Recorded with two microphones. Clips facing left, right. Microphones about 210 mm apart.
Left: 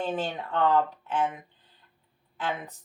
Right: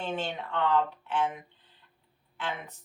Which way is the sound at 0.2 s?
40° left (ahead or behind).